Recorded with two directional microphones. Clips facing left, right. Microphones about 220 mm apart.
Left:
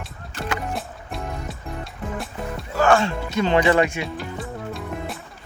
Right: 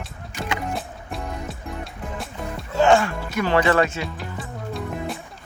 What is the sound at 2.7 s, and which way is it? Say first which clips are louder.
Music: right 1 dB; 20° right (ahead or behind).